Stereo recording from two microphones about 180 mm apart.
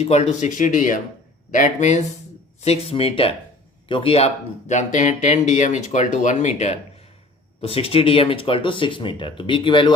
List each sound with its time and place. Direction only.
0.0 s speech: 40° left (ahead or behind)